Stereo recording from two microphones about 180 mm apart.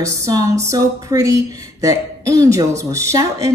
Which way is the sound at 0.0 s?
20° right (ahead or behind).